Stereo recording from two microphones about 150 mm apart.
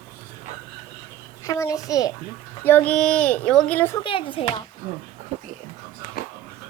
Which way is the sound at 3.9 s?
35° left (ahead or behind).